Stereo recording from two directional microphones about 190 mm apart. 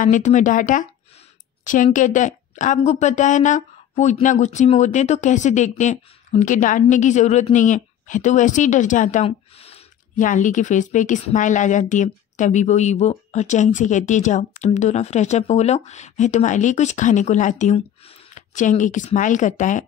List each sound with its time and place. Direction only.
0.0 s a woman's voice: 40° left (ahead or behind)